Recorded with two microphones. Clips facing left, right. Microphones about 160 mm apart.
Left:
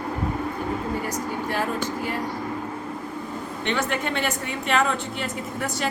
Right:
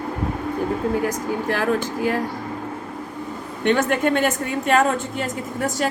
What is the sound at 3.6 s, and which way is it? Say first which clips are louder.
A woman's voice: right 8 dB; 45° right (ahead or behind).